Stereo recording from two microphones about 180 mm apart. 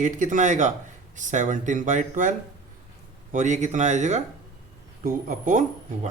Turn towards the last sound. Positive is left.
turn(degrees=-45)  # may be behind; listen again after turning